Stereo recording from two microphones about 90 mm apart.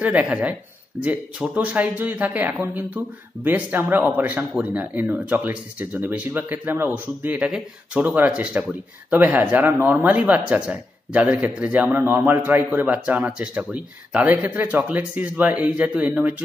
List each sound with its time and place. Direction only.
0.0 s speech: 15° right (ahead or behind)
7.2 s speech: 10° right (ahead or behind)